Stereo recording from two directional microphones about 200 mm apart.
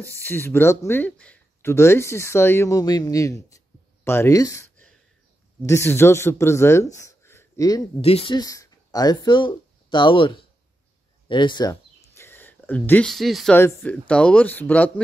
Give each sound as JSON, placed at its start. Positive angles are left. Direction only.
{"t": 0.0, "sound": "speech", "side_deg": 10}
{"t": 8.0, "sound": "speech", "side_deg": 30}
{"t": 11.2, "sound": "a sound", "side_deg": 25}
{"t": 13.6, "sound": "speech", "side_deg": 10}